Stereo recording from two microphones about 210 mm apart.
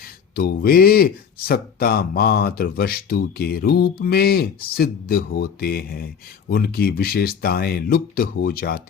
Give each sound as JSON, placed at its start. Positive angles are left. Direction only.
{"t": 0.3, "sound": "speech", "side_deg": 45}